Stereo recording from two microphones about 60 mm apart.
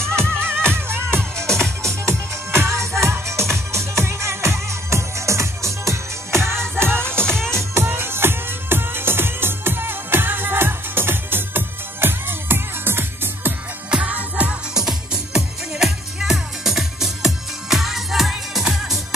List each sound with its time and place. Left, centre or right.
0.4 s music: right
13.8 s music: right
14.7 s music: centre